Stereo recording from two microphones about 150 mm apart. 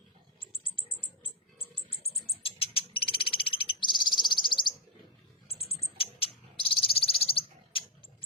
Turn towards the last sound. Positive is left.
turn(degrees=40)  # may be behind; listen again after turning